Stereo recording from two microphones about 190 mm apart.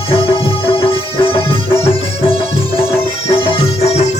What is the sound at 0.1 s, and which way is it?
Music, 30° left (ahead or behind).